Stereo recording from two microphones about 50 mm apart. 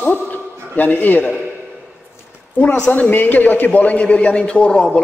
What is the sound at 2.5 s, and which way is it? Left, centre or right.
Speech, left.